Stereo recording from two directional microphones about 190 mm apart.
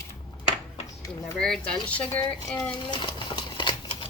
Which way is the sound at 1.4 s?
5° left (ahead or behind).